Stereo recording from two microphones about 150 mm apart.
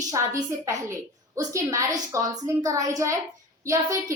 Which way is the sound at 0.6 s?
20° right (ahead or behind).